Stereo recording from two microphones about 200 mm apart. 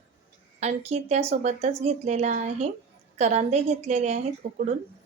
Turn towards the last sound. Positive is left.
turn(degrees=-35)  # may be behind; listen again after turning